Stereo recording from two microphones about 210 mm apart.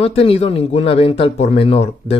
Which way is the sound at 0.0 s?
30° left (ahead or behind).